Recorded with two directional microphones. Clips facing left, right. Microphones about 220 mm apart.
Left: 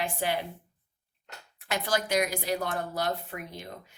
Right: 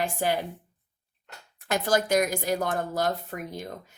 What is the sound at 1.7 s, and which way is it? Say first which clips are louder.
Speech: right 4 dB; 45° right (ahead or behind).